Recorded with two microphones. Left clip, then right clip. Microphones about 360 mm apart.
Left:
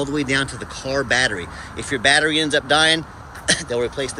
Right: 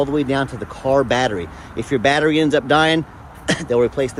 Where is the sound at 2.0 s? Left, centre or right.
Centre.